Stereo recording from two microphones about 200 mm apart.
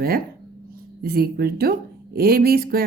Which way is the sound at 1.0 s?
50° right (ahead or behind).